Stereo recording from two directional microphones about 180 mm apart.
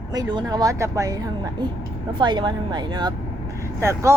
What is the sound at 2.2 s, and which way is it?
A woman's voice, 25° right (ahead or behind).